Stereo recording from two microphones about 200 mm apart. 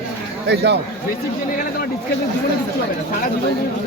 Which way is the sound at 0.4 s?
60° right (ahead or behind).